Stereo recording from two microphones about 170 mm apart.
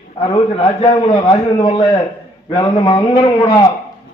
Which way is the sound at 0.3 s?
25° left (ahead or behind).